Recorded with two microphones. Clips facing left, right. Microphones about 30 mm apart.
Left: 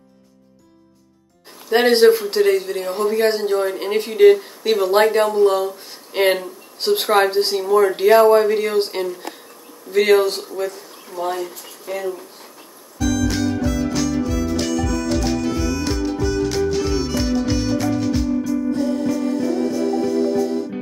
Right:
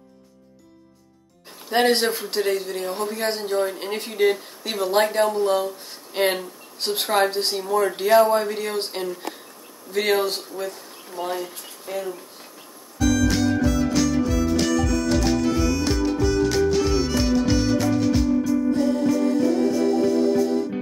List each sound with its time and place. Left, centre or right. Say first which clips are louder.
1.7 s speech: left 7 dB; centre
11.9 s speech: left 2 dB; centre
13.0 s music: even; centre